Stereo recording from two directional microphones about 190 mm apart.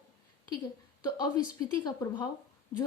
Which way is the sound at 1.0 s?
20° left (ahead or behind).